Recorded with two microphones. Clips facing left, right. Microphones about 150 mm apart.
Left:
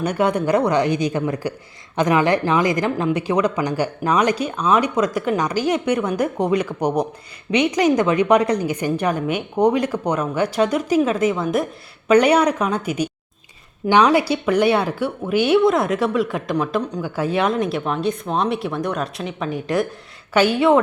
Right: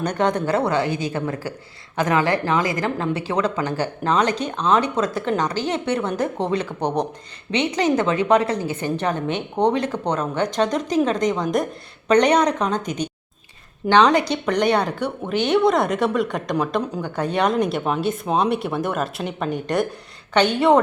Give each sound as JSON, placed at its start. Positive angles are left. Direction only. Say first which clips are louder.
{"t": 0.0, "sound": "a woman's voice", "louder": "left 2 dB", "side_deg": 10}